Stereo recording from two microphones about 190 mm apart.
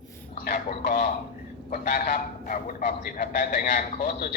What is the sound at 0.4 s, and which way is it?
A man's voice, 45° left (ahead or behind).